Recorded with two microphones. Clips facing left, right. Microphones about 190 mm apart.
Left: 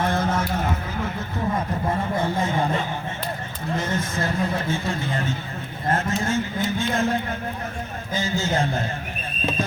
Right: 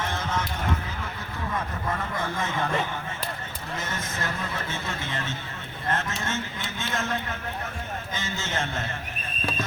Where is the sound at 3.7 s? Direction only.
30° left (ahead or behind).